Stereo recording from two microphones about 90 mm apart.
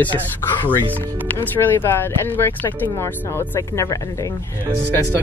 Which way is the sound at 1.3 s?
25° left (ahead or behind).